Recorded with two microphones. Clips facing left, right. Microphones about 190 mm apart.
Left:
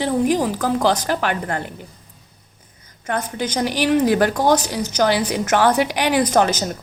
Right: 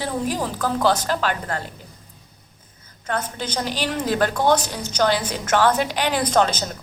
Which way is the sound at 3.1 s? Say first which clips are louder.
Left 3 dB; 10° left (ahead or behind).